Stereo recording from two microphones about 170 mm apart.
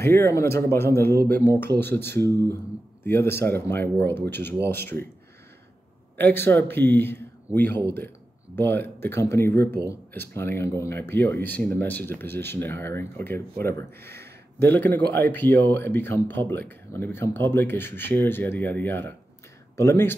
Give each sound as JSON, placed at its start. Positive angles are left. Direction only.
{"t": 0.0, "sound": "speech", "side_deg": 15}
{"t": 2.2, "sound": "speech", "side_deg": -20}
{"t": 3.0, "sound": "speech", "side_deg": 15}
{"t": 6.1, "sound": "speech", "side_deg": 10}